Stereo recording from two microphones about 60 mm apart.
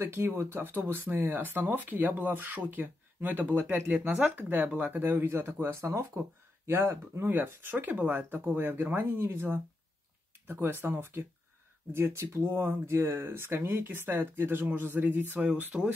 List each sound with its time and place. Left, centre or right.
0.0 s speech: right